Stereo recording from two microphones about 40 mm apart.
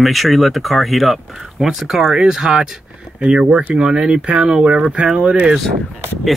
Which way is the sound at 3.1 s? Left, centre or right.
Right.